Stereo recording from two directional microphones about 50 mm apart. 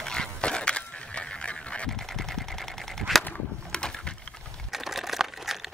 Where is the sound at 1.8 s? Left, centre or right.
Centre.